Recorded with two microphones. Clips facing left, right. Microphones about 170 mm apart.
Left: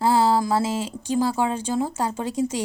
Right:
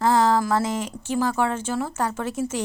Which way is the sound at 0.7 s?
15° left (ahead or behind).